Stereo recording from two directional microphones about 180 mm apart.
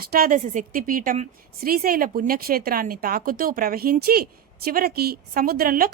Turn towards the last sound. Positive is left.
turn(degrees=-50)  # may be behind; listen again after turning